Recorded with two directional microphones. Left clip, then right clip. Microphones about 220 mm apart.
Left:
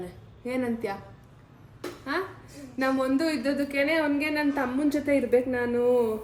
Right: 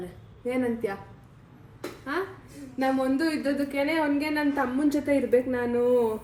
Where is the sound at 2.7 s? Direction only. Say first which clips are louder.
Even; 5° left (ahead or behind).